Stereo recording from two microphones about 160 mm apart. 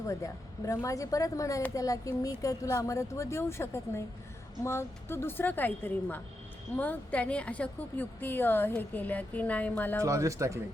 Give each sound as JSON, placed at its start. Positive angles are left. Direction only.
{"t": 0.1, "sound": "a woman's voice", "side_deg": 20}
{"t": 10.0, "sound": "speech", "side_deg": -20}